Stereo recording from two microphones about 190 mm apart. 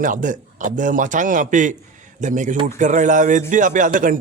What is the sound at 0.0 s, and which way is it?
A man's voice, 45° right (ahead or behind).